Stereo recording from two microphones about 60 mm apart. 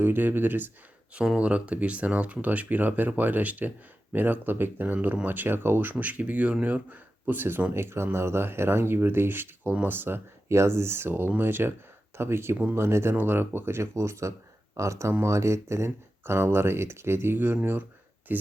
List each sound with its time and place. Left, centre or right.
0.0 s speech: right
1.4 s speech: right
5.9 s speech: right
10.5 s speech: right
13.9 s speech: right
17.3 s speech: right